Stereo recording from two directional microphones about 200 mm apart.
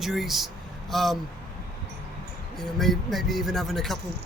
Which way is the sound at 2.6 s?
Centre (ahead or behind).